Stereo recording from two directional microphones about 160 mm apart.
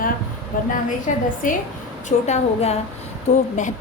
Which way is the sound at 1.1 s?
50° left (ahead or behind).